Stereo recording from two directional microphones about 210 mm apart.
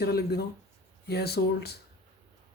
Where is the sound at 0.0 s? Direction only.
50° left (ahead or behind).